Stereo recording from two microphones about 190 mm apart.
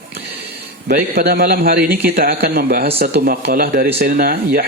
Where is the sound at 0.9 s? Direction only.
55° right (ahead or behind).